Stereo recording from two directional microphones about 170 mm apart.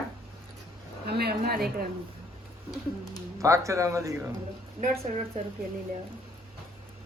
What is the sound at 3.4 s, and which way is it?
Speech, 20° right (ahead or behind).